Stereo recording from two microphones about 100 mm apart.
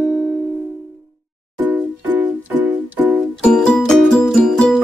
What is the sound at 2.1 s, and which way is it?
Music, 15° right (ahead or behind).